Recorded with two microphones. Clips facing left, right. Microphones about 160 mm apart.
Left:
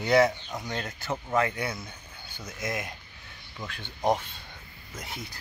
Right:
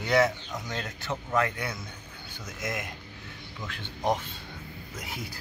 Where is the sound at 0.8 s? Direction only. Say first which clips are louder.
Left 1 dB; 40° left (ahead or behind).